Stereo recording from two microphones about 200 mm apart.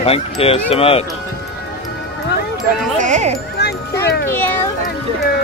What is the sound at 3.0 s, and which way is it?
Speech, 35° right (ahead or behind).